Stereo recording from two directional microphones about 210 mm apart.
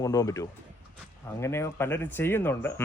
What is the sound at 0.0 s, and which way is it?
Speech, 15° left (ahead or behind).